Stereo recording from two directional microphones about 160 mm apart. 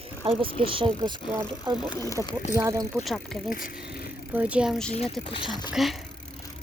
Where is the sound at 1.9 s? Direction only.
20° left (ahead or behind).